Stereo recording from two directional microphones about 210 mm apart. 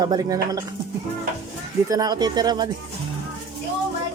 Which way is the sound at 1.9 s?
20° right (ahead or behind).